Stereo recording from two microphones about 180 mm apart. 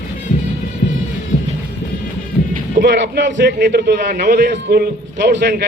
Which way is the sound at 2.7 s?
70° right (ahead or behind).